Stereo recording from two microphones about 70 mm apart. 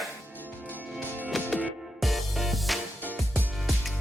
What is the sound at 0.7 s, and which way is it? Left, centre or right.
Music, right.